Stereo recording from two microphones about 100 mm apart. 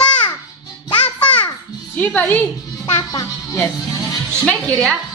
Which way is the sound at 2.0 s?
15° left (ahead or behind).